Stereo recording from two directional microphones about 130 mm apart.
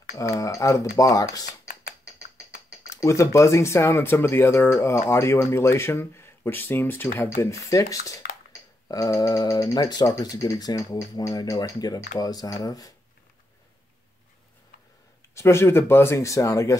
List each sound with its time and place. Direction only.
0.1 s speech: 25° left (ahead or behind)
1.4 s computer keyboard: 90° left
2.9 s speech: 20° left (ahead or behind)
15.3 s speech: 20° left (ahead or behind)